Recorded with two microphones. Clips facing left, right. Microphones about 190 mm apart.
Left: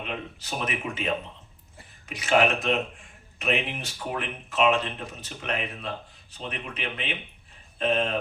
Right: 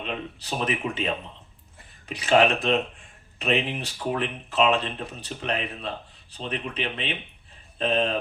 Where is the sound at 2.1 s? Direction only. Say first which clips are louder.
Right 2 dB; 35° right (ahead or behind).